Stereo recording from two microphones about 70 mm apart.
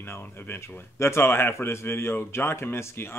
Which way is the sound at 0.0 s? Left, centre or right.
Left.